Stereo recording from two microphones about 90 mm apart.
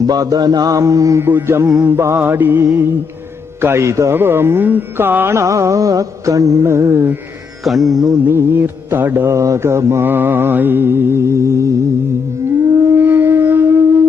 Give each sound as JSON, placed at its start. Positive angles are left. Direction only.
{"t": 0.0, "sound": "mantra", "side_deg": -45}
{"t": 1.2, "sound": "mantra", "side_deg": -25}
{"t": 3.6, "sound": "speech", "side_deg": -30}
{"t": 7.6, "sound": "music", "side_deg": 0}
{"t": 8.3, "sound": "mantra", "side_deg": -25}
{"t": 13.0, "sound": "wind instrument", "side_deg": -20}